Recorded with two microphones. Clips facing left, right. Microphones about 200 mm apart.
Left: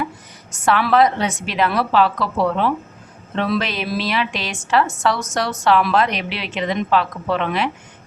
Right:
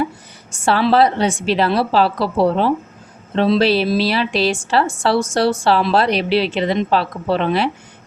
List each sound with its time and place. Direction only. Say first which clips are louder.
0.5 s a woman's voice: right 2 dB; 30° right (ahead or behind)